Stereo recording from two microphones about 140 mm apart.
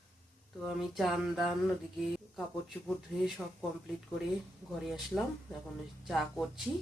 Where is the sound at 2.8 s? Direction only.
Centre (ahead or behind).